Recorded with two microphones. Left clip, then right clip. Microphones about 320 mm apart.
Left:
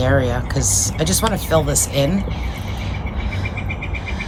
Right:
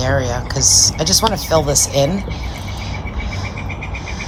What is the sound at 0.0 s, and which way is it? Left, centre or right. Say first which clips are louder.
Speech: even; centre.